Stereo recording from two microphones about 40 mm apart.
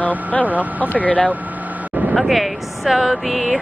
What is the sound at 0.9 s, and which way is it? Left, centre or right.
Speech, left.